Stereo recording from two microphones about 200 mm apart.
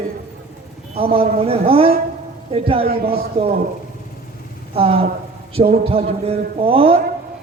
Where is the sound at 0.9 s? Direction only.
30° right (ahead or behind).